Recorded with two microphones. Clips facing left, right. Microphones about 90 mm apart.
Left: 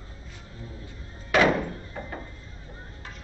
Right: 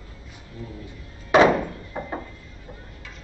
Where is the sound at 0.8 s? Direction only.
25° right (ahead or behind).